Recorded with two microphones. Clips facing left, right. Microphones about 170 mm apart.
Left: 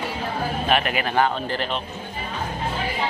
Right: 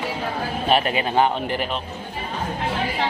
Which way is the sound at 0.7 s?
30° right (ahead or behind).